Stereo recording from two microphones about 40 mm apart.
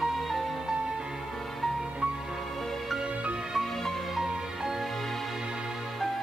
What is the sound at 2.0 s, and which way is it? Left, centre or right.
Music, right.